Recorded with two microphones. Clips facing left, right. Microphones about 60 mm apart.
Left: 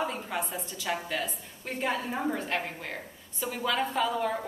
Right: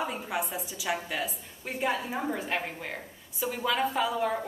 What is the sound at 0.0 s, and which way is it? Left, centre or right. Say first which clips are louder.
A woman's voice: even; centre.